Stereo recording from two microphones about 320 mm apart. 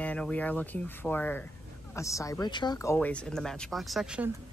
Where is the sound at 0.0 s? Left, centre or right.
Centre.